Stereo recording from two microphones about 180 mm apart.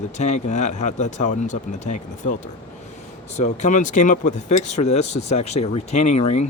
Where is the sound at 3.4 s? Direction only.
40° left (ahead or behind).